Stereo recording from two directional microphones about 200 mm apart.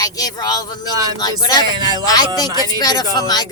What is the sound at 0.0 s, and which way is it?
Speech, 15° left (ahead or behind).